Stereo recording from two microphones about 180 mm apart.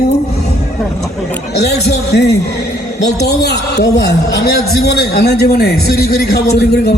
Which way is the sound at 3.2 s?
65° left (ahead or behind).